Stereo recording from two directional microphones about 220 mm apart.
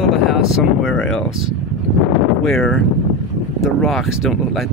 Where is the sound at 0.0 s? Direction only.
Centre (ahead or behind).